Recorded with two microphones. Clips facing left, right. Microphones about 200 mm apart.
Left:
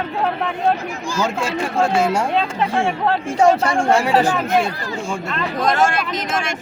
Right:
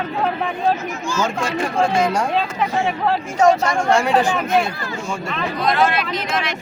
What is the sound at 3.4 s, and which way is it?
Speech, 30° left (ahead or behind).